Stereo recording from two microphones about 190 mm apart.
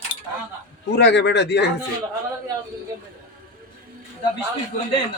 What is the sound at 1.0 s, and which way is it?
Speech, 65° left (ahead or behind).